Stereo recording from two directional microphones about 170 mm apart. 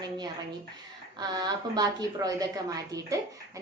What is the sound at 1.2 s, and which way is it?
A woman's voice, 25° right (ahead or behind).